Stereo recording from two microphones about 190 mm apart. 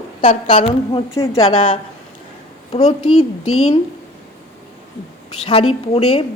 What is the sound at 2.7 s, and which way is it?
Speech, 35° left (ahead or behind).